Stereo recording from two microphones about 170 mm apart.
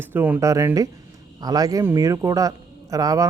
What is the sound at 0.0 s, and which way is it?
A man's voice, 10° right (ahead or behind).